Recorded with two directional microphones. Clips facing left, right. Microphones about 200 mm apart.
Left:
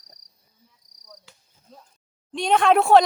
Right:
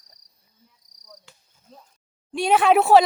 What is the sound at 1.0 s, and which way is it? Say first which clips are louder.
Cricket: even; centre (ahead or behind).